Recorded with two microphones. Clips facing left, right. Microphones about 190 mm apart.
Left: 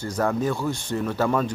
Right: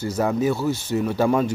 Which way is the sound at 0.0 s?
10° right (ahead or behind).